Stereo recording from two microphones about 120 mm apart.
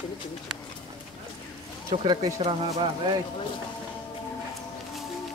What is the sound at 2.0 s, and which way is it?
Speech, 45° right (ahead or behind).